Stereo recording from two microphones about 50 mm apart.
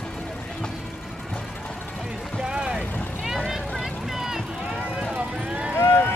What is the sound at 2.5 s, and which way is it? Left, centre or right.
Vehicle, centre.